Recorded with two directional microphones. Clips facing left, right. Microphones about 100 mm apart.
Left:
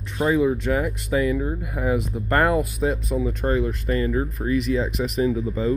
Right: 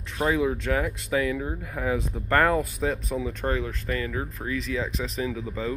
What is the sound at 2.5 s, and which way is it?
Speech, 15° left (ahead or behind).